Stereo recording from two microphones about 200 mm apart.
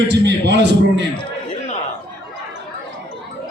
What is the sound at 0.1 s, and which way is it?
Speech, 60° right (ahead or behind).